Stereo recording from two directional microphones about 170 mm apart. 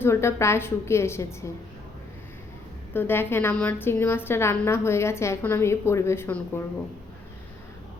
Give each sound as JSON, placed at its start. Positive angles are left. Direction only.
{"t": 0.0, "sound": "a woman's voice", "side_deg": 15}
{"t": 2.9, "sound": "a woman's voice", "side_deg": 10}